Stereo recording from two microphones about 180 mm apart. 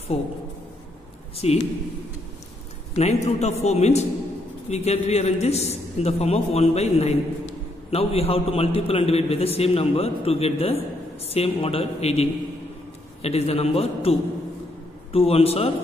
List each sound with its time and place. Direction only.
0.1 s a man's voice: 30° left (ahead or behind)
1.3 s a man's voice: 35° left (ahead or behind)
2.9 s a man's voice: 35° left (ahead or behind)
15.1 s a man's voice: 35° left (ahead or behind)